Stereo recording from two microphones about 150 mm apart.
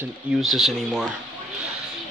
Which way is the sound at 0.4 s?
Centre (ahead or behind).